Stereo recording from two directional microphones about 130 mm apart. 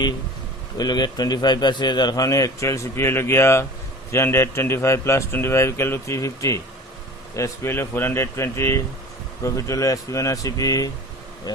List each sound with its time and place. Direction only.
0.8 s a man's voice: 30° left (ahead or behind)